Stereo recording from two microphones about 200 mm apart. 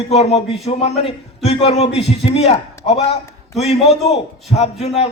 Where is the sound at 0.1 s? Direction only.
30° left (ahead or behind).